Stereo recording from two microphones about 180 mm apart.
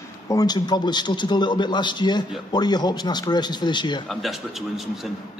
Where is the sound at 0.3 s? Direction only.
20° left (ahead or behind).